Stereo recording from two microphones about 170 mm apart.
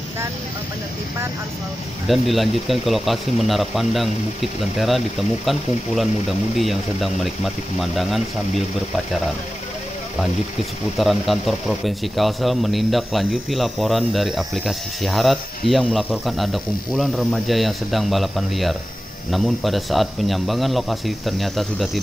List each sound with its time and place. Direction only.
2.0 s speech: centre (ahead or behind)
11.0 s speech: centre (ahead or behind)